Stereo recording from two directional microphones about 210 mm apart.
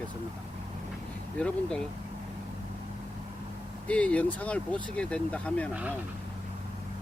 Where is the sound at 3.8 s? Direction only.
5° left (ahead or behind).